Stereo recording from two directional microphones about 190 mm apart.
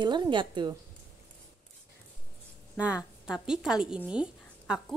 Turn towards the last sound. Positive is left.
turn(degrees=-5)  # may be behind; listen again after turning